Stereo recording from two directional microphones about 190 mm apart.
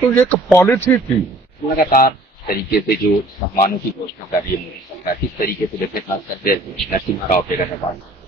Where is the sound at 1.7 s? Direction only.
50° left (ahead or behind).